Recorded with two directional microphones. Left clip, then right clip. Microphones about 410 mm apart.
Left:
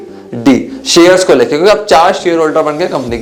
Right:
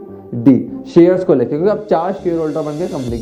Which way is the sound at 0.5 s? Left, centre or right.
Centre.